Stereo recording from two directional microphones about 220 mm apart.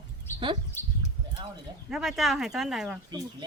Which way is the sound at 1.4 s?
25° right (ahead or behind).